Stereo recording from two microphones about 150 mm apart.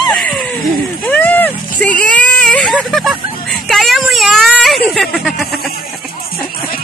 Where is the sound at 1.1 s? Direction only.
10° left (ahead or behind).